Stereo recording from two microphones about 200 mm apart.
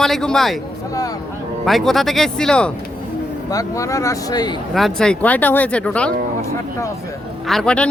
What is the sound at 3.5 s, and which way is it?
Speech, 15° left (ahead or behind).